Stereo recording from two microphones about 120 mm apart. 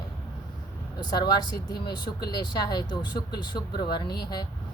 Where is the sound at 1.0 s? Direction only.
35° left (ahead or behind).